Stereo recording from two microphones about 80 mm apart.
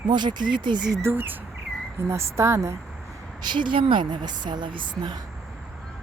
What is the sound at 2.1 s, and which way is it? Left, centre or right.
Speech, right.